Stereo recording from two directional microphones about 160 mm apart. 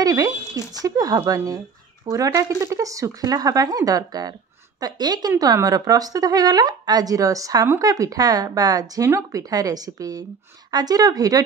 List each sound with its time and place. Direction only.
0.0 s speech: 25° right (ahead or behind)